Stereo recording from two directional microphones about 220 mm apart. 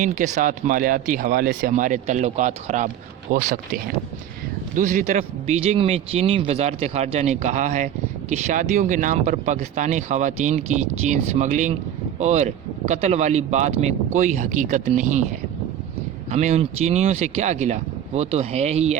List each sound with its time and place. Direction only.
0.0 s speech: 35° right (ahead or behind)
4.7 s a man's voice: 35° right (ahead or behind)
16.3 s speech: 30° right (ahead or behind)